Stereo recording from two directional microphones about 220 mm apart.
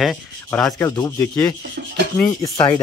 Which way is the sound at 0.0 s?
Centre (ahead or behind).